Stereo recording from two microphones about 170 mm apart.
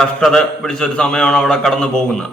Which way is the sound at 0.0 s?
Centre (ahead or behind).